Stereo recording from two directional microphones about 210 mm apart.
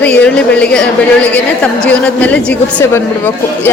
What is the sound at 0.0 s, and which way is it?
A woman's voice, 5° left (ahead or behind).